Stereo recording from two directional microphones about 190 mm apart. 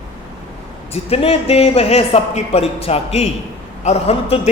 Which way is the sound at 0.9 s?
30° left (ahead or behind).